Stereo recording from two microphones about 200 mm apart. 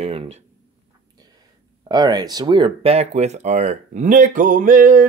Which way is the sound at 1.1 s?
20° right (ahead or behind).